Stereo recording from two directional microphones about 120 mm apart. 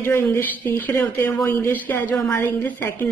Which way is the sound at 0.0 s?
20° left (ahead or behind).